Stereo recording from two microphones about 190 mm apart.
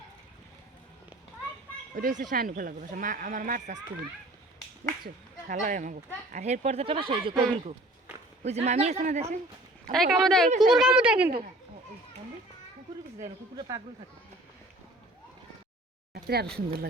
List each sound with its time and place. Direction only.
2.0 s speech: 45° right (ahead or behind)
5.0 s speech: 40° right (ahead or behind)
9.9 s speech: centre (ahead or behind)
13.6 s speech: 20° right (ahead or behind)
16.1 s a sound: 55° right (ahead or behind)